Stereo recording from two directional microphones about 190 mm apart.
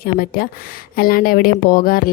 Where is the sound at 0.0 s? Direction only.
50° left (ahead or behind).